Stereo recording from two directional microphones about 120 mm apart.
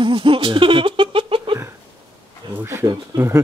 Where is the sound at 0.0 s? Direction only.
45° right (ahead or behind).